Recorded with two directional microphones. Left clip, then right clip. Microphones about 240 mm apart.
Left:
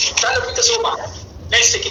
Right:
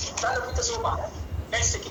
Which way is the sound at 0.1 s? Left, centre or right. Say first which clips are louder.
Left 10 dB; left.